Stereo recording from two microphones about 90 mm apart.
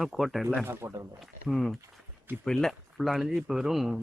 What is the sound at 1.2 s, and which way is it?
Speech, centre (ahead or behind).